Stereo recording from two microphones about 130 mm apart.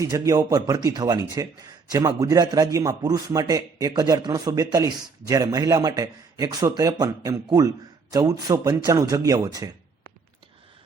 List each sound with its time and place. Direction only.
0.0 s a man's voice: 30° right (ahead or behind)